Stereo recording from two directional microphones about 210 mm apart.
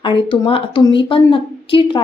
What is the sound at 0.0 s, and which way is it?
A woman's voice, 25° left (ahead or behind).